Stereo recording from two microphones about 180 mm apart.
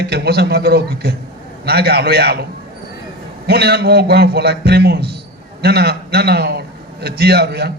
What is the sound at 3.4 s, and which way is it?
A man's voice, 65° right (ahead or behind).